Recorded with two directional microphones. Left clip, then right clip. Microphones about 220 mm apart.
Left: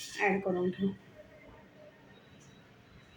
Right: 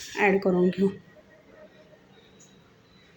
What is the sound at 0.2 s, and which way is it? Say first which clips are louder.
Speech: right 7 dB; 55° right (ahead or behind).